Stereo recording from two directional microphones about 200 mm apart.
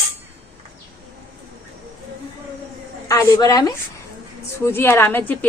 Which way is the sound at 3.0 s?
15° left (ahead or behind).